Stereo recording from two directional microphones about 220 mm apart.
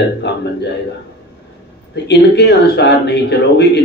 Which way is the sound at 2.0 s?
50° left (ahead or behind).